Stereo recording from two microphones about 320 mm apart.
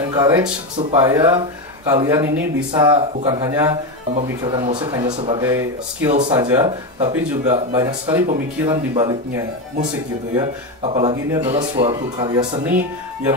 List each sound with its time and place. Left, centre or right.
0.1 s speech: centre
6.0 s speech: centre